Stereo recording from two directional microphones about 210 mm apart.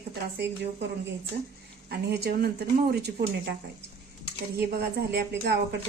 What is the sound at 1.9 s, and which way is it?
Speech, 50° right (ahead or behind).